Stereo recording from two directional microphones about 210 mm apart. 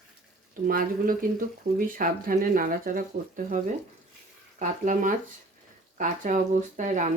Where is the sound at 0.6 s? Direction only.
40° right (ahead or behind).